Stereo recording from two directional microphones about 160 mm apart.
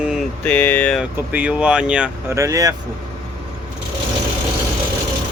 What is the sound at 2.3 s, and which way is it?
Speech, 20° right (ahead or behind).